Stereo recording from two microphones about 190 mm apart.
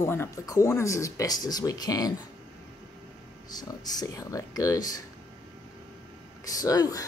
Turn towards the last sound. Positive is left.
turn(degrees=20)  # may be behind; listen again after turning